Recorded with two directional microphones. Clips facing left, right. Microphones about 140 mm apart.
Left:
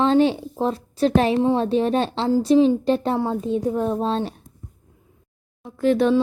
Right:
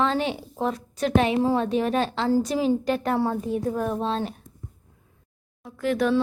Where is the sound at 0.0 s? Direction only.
30° left (ahead or behind).